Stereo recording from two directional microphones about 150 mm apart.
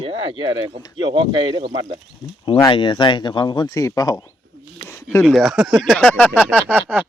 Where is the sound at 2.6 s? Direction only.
30° left (ahead or behind).